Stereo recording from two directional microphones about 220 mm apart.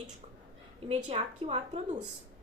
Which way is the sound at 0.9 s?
30° right (ahead or behind).